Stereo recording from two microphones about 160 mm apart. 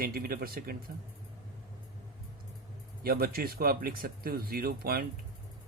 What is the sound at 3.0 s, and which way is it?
Speech, 70° right (ahead or behind).